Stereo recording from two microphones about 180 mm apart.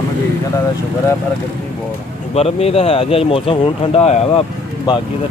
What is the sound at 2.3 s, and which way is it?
Speech, 35° left (ahead or behind).